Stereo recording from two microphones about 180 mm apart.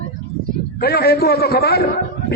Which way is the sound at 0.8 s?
60° left (ahead or behind).